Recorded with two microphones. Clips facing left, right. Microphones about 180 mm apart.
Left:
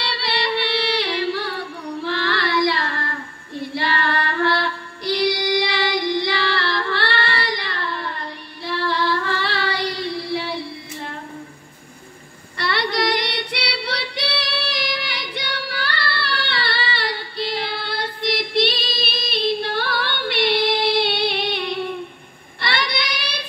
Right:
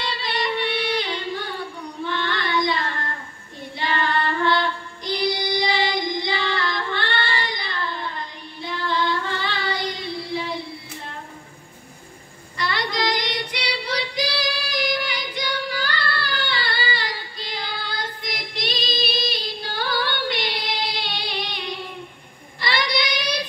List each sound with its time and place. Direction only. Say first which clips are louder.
0.0 s singing: left 2 dB; 70° left (ahead or behind)
2.0 s child singing: left 3 dB; 70° left (ahead or behind)
3.7 s female singing: left 1 dB; 70° left (ahead or behind)
12.5 s female singing: left 3 dB; 65° left (ahead or behind)
22.6 s child singing: right 1 dB; 60° left (ahead or behind)